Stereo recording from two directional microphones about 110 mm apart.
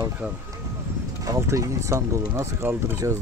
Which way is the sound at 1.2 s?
25° right (ahead or behind).